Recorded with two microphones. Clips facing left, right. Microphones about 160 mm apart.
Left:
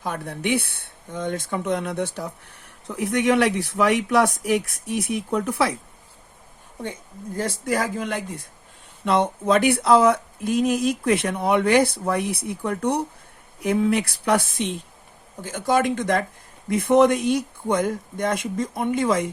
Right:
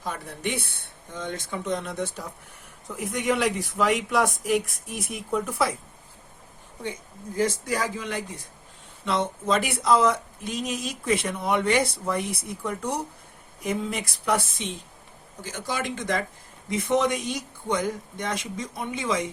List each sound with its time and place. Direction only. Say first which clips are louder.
0.0 s speech: left 4 dB; 65° left (ahead or behind)
7.4 s speech: left 2 dB; 55° left (ahead or behind)